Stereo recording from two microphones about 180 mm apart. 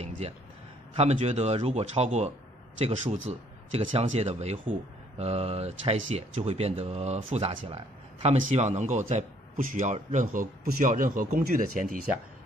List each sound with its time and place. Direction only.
0.2 s a man's voice: 35° right (ahead or behind)